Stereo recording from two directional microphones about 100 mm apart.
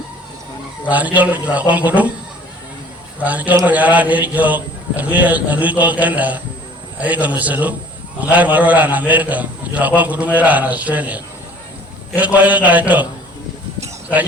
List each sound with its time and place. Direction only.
0.9 s a man's voice: 15° right (ahead or behind)
3.2 s a man's voice: 15° right (ahead or behind)